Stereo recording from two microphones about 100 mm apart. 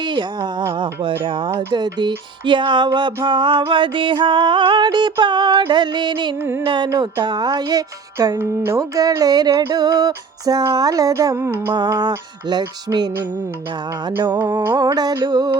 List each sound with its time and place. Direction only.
0.0 s a sound: 50° right (ahead or behind)
1.2 s music: 55° right (ahead or behind)
1.5 s music: 45° right (ahead or behind)
6.4 s speech: 20° right (ahead or behind)
6.7 s music: 50° right (ahead or behind)
8.4 s speech: 25° right (ahead or behind)
8.8 s a sound: 40° right (ahead or behind)
11.7 s music: 45° right (ahead or behind)
14.8 s a sound: 40° right (ahead or behind)
15.2 s music: 45° right (ahead or behind)